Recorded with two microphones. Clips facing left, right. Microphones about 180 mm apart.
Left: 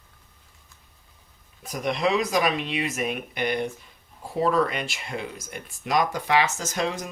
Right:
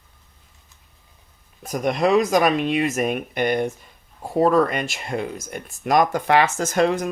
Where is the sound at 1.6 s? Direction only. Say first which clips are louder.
Right 5 dB; 45° right (ahead or behind).